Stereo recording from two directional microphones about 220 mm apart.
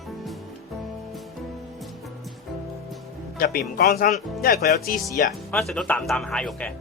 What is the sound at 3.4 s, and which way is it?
Speech, 40° left (ahead or behind).